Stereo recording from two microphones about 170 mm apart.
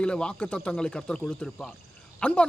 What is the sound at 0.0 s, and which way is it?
A man's voice, 5° left (ahead or behind).